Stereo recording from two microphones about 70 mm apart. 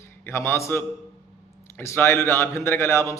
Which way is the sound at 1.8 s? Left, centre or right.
Left.